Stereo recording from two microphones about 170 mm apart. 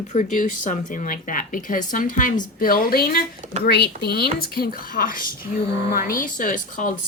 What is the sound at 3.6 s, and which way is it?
Speech, 70° left (ahead or behind).